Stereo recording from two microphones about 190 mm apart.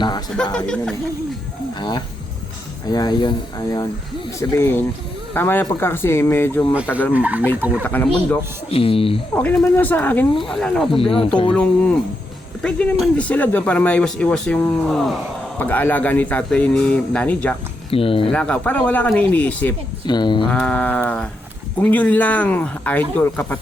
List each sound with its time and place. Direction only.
0.5 s speech: 5° left (ahead or behind)
1.8 s speech: 25° left (ahead or behind)
7.1 s speech: 10° right (ahead or behind)
7.8 s speech: 10° left (ahead or behind)
8.7 s speech: 30° left (ahead or behind)
9.3 s speech: 10° left (ahead or behind)
10.9 s speech: 30° left (ahead or behind)
11.5 s speech: 5° left (ahead or behind)
17.9 s speech: 30° left (ahead or behind)
18.3 s speech: 5° left (ahead or behind)
20.1 s speech: 25° left (ahead or behind)
20.5 s speech: 5° left (ahead or behind)